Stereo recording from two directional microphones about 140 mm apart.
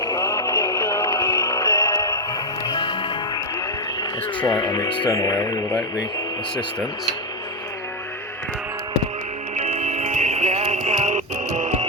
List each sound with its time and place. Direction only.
0.0 s music: 25° left (ahead or behind)
2.6 s music: 35° left (ahead or behind)
4.4 s speech: 30° left (ahead or behind)
9.6 s music: 55° right (ahead or behind)